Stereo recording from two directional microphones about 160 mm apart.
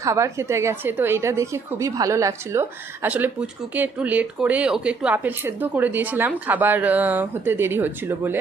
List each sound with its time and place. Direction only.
0.0 s a woman's voice: 20° right (ahead or behind)